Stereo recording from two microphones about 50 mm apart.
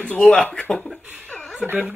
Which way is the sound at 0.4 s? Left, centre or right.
Left.